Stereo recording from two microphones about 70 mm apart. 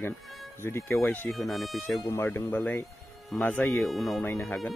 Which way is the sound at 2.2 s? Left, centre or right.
Left.